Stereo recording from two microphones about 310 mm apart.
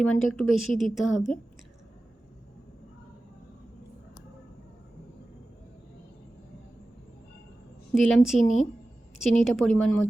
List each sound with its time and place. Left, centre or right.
0.0 s a woman's voice: centre
7.9 s a woman's voice: centre